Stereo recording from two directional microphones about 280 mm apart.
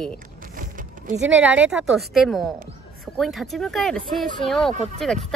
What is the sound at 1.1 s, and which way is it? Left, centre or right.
Speech, right.